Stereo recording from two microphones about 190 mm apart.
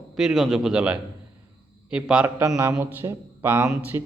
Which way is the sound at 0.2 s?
Centre (ahead or behind).